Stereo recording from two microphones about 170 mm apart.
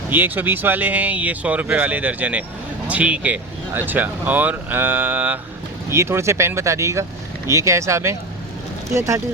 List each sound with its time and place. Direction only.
0.1 s speech: 10° right (ahead or behind)